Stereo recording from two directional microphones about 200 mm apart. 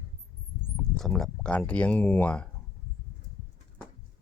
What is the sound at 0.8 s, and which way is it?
Speech, centre (ahead or behind).